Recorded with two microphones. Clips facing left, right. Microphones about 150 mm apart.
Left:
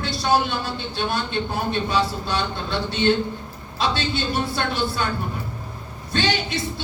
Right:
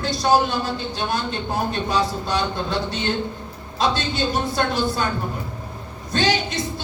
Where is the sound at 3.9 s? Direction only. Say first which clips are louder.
Right 2 dB; 45° right (ahead or behind).